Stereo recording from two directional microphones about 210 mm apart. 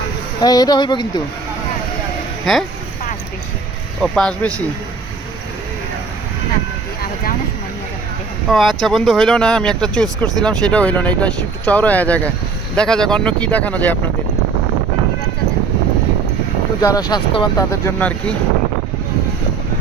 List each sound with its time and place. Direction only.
0.4 s speech: 20° left (ahead or behind)
2.4 s speech: centre (ahead or behind)
4.0 s speech: 5° left (ahead or behind)
8.4 s speech: centre (ahead or behind)
16.8 s speech: 15° left (ahead or behind)